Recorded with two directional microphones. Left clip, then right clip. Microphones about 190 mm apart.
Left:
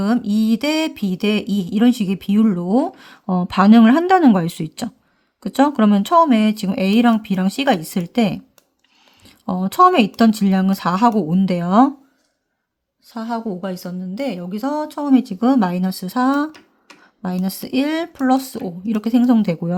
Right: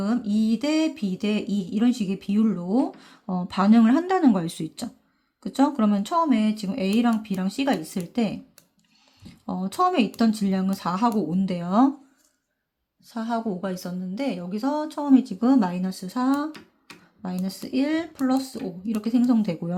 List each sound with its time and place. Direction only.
0.0 s speech: 40° left (ahead or behind)
13.1 s a woman's voice: 20° left (ahead or behind)